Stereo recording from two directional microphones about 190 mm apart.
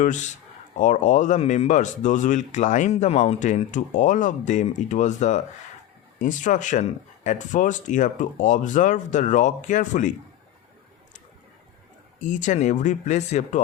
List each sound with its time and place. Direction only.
0.0 s speech: 40° left (ahead or behind)
12.2 s speech: 40° left (ahead or behind)